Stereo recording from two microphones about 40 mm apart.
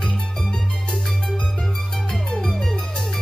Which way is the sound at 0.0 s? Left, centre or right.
Centre.